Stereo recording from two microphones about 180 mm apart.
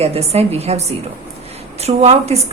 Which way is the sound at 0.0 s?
35° right (ahead or behind).